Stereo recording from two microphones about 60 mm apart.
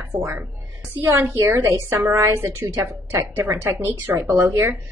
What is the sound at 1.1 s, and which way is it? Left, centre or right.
A woman's voice, right.